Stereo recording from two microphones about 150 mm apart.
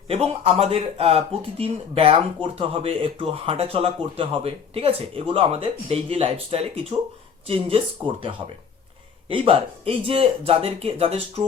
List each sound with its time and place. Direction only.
0.1 s speech: 40° right (ahead or behind)
9.3 s speech: 40° right (ahead or behind)